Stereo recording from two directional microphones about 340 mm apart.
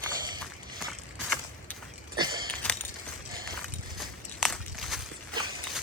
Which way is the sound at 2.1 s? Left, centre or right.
Centre.